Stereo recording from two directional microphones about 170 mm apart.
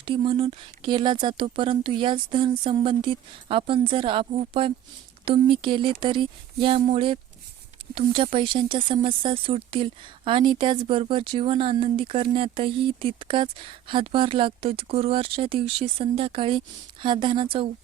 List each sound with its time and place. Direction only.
0.0 s speech: 30° right (ahead or behind)